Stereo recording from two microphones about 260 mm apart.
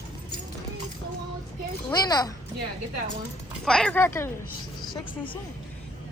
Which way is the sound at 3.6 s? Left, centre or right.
Centre.